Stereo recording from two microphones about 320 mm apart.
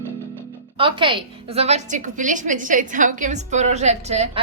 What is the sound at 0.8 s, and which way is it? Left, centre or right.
A woman's voice, centre.